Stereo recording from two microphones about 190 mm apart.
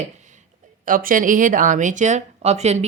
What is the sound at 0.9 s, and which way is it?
Speech, 45° right (ahead or behind).